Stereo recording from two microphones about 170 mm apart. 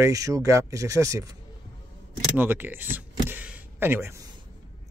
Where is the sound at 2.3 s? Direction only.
10° right (ahead or behind).